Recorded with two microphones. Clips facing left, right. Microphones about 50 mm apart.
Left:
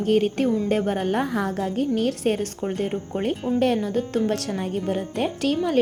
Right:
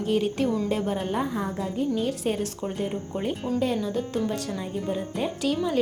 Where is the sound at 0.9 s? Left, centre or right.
Left.